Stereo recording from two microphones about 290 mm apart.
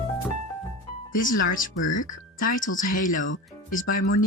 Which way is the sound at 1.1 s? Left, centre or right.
Left.